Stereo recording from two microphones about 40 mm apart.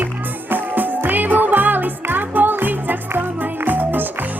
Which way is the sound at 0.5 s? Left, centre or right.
Right.